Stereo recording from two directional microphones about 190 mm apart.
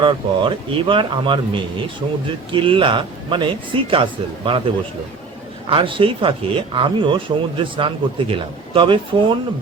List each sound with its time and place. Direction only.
0.0 s speech: 25° right (ahead or behind)
5.6 s speech: 25° right (ahead or behind)